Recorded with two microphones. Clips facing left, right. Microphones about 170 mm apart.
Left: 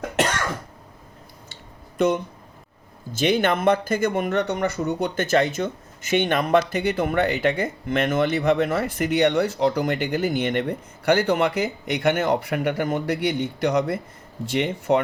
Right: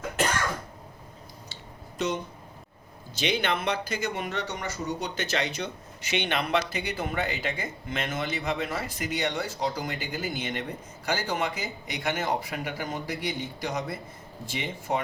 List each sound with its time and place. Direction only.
0.2 s cough: 75° left (ahead or behind)
2.0 s speech: 55° left (ahead or behind)